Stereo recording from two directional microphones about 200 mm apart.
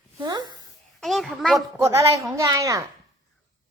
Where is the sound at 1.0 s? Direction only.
Centre (ahead or behind).